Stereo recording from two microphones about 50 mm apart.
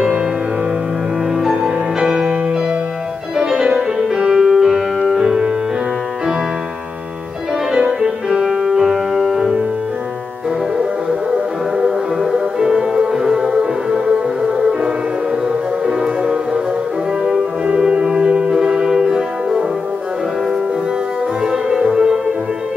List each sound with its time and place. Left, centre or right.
1.4 s music: centre
3.3 s music: centre
8.3 s music: centre
11.8 s music: centre
17.2 s french horn: centre
21.5 s music: centre